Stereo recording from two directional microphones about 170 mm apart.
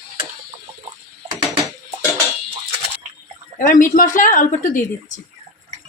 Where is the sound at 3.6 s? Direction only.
50° left (ahead or behind).